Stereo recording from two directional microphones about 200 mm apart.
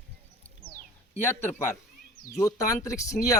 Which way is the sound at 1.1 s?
10° left (ahead or behind).